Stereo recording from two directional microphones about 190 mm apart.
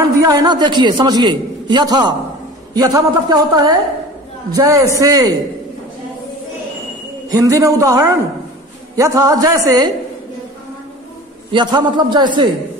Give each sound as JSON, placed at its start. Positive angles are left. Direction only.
{"t": 0.2, "sound": "a man's voice", "side_deg": -20}
{"t": 7.2, "sound": "a woman's voice", "side_deg": -15}
{"t": 11.5, "sound": "a man's voice", "side_deg": -25}